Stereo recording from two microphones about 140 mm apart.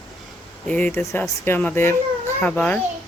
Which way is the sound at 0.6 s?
10° left (ahead or behind).